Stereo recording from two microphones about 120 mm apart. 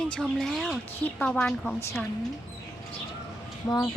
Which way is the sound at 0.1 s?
5° left (ahead or behind).